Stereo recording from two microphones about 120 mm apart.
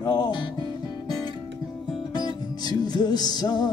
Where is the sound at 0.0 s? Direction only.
35° left (ahead or behind).